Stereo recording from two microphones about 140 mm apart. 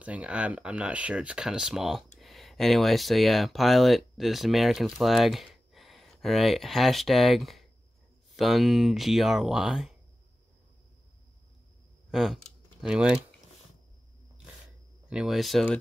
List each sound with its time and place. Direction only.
0.0 s speech: 10° right (ahead or behind)
12.1 s speech: centre (ahead or behind)
15.0 s speech: 5° right (ahead or behind)